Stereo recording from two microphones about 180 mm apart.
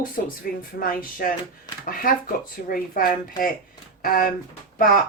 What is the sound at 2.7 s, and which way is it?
Speech, 50° left (ahead or behind).